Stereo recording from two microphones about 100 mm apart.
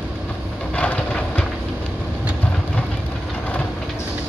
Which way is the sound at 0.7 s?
10° left (ahead or behind).